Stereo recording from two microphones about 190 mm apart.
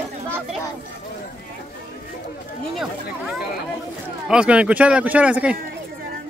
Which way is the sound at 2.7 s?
Centre (ahead or behind).